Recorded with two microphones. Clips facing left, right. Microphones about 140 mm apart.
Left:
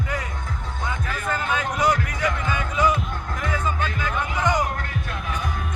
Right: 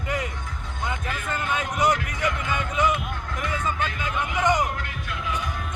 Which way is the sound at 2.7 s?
20° right (ahead or behind).